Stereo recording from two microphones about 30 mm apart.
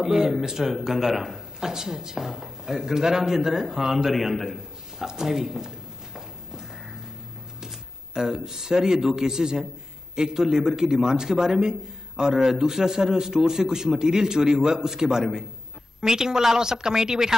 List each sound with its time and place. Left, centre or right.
0.0 s speech: centre
4.1 s a sound: centre
7.6 s a man's voice: right